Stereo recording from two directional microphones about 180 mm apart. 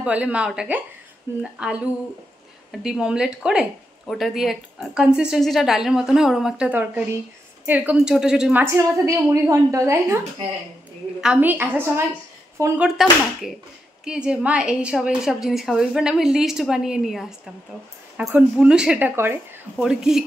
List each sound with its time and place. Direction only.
0.0 s a woman's voice: 5° right (ahead or behind)
8.6 s a woman's voice: 15° right (ahead or behind)
11.1 s a woman's voice: 5° right (ahead or behind)
12.8 s a woman's voice: centre (ahead or behind)